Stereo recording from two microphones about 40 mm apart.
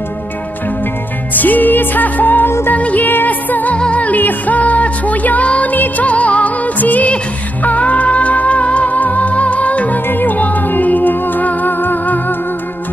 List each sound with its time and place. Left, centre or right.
1.3 s music: left
3.7 s music: left
10.0 s music: left